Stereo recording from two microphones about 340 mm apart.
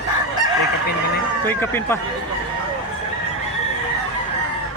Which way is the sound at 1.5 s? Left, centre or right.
Centre.